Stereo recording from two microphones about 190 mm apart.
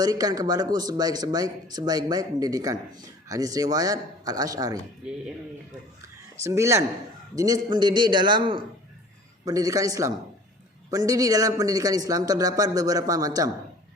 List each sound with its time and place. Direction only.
0.0 s a man's voice: 20° right (ahead or behind)
6.0 s a sound: 15° right (ahead or behind)
7.3 s a man's voice: 20° right (ahead or behind)